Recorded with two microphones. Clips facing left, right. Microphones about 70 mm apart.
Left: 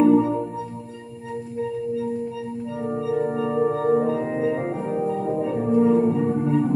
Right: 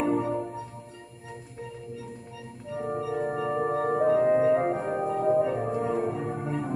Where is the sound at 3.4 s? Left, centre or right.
Right.